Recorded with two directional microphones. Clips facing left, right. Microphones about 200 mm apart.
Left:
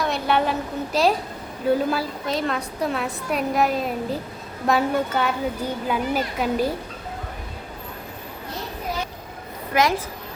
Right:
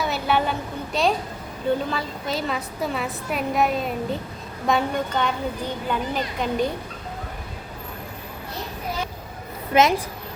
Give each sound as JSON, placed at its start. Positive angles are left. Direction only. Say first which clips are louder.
{"t": 0.0, "sound": "a sound", "louder": "left 1 dB", "side_deg": 0}
{"t": 0.9, "sound": "a woman's voice", "louder": "left 2 dB", "side_deg": 0}
{"t": 9.7, "sound": "a woman's voice", "louder": "right 3 dB", "side_deg": -25}